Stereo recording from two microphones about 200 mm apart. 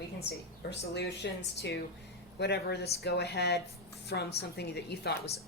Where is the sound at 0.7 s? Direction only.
60° left (ahead or behind).